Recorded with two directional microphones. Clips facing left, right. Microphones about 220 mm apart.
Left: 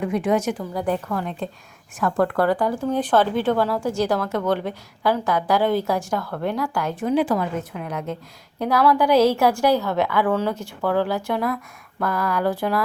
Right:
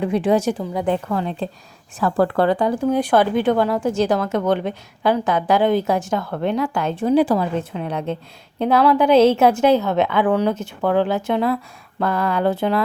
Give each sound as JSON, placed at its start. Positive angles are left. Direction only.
{"t": 0.0, "sound": "a woman's voice", "side_deg": -30}